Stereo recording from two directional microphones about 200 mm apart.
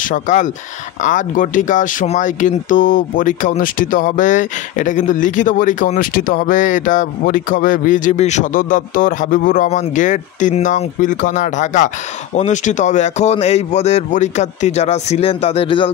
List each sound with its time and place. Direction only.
0.0 s speech: 40° left (ahead or behind)